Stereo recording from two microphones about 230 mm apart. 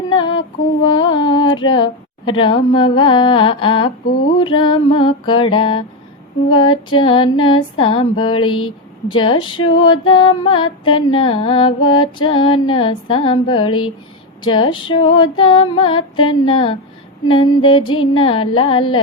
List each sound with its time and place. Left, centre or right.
0.1 s female singing: left
0.9 s music: centre